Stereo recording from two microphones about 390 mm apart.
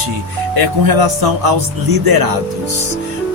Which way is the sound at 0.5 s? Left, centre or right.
Right.